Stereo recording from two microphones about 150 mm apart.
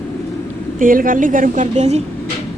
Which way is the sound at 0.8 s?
65° right (ahead or behind).